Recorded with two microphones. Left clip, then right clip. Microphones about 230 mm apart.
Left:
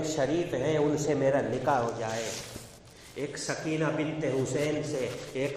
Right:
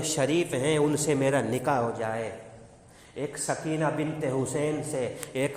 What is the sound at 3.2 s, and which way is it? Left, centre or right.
A man's voice, right.